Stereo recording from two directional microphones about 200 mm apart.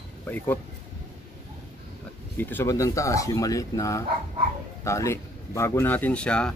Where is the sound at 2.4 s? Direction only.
10° left (ahead or behind).